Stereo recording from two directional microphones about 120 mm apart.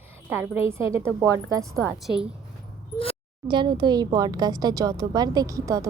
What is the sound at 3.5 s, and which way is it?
A woman's voice, 40° right (ahead or behind).